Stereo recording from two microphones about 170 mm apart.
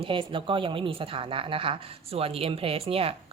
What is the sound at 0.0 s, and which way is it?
A woman's voice, 30° right (ahead or behind).